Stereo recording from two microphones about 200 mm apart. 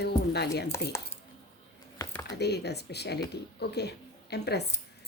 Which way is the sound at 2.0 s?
20° left (ahead or behind).